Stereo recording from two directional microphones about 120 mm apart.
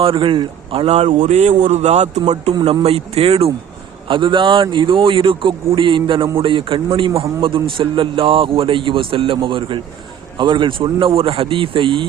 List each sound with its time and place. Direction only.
0.0 s a man's voice: 45° right (ahead or behind); by 2.2 s 70° right (ahead or behind)
2.8 s a man's voice: 55° right (ahead or behind)
4.1 s a man's voice: 45° right (ahead or behind)